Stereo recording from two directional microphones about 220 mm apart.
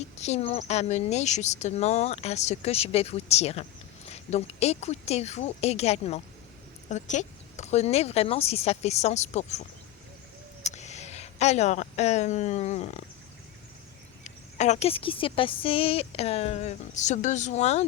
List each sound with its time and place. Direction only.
0.2 s speech: 30° left (ahead or behind)
14.3 s speech: 30° left (ahead or behind)